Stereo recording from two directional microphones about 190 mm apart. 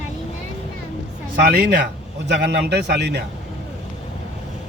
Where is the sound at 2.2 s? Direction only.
65° right (ahead or behind).